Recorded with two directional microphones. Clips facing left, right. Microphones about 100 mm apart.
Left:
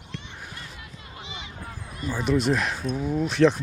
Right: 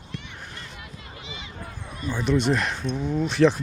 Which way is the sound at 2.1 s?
Centre (ahead or behind).